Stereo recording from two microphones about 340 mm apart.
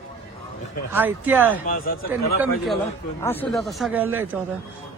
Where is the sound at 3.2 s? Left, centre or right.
Centre.